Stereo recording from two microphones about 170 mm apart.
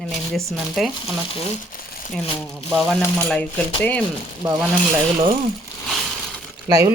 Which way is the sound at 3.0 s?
10° left (ahead or behind).